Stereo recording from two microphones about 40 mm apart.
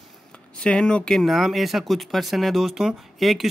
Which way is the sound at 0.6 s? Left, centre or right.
Left.